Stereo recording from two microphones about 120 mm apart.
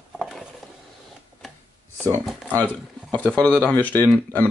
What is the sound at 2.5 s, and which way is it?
Speech, 15° left (ahead or behind).